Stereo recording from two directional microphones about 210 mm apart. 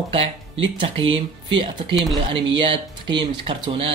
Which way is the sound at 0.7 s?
25° right (ahead or behind).